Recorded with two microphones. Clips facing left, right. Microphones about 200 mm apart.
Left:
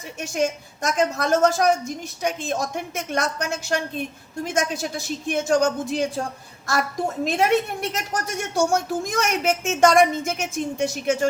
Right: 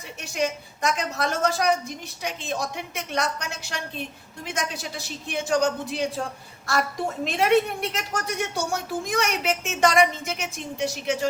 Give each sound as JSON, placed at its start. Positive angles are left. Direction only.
{"t": 0.2, "sound": "a woman's voice", "side_deg": 45}
{"t": 7.3, "sound": "a woman's voice", "side_deg": 45}